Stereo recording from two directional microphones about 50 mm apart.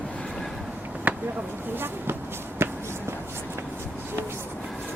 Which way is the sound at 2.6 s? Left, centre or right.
Right.